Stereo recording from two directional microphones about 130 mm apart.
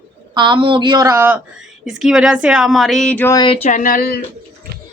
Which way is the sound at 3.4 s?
45° left (ahead or behind).